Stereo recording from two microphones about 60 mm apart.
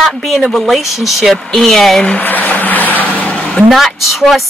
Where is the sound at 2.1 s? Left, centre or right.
Left.